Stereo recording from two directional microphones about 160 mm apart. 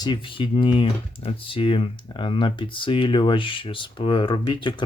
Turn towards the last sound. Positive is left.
turn(degrees=30)  # may be behind; listen again after turning